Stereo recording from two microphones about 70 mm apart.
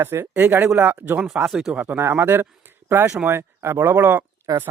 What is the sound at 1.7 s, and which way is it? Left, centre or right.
Speech, right.